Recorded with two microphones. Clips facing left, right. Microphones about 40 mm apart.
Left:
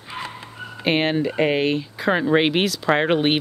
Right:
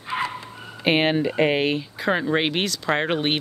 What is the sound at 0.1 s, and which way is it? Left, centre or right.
Bow-wow, right.